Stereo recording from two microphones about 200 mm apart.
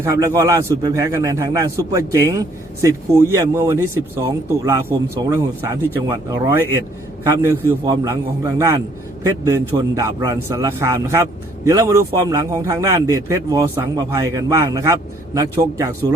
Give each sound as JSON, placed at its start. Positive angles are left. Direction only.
{"t": 0.0, "sound": "a man's voice", "side_deg": -15}